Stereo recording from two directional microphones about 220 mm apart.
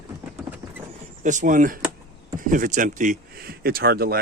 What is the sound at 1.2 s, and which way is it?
Speech, 35° right (ahead or behind).